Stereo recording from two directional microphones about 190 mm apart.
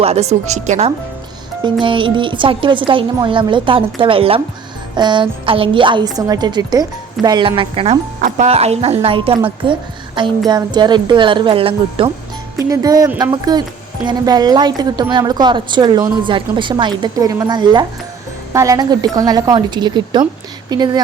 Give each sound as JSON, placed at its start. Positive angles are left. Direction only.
{"t": 0.0, "sound": "speech", "side_deg": -35}
{"t": 12.5, "sound": "speech", "side_deg": -15}